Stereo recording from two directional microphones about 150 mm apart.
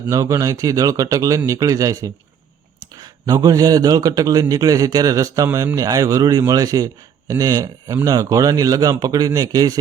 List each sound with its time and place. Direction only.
0.1 s a man's voice: 20° right (ahead or behind)